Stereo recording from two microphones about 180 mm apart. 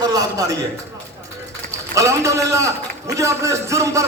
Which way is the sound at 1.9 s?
15° right (ahead or behind).